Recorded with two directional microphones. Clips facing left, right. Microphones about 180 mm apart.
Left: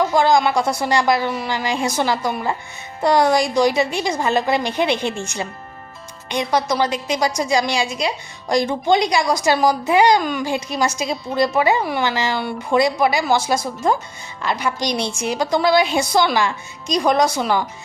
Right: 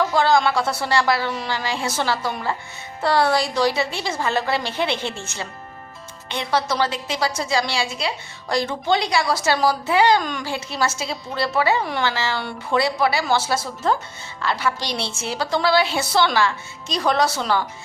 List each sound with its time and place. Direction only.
0.0 s a woman's voice: 15° left (ahead or behind)